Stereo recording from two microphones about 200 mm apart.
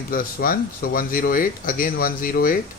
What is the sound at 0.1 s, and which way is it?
Speech, 45° left (ahead or behind).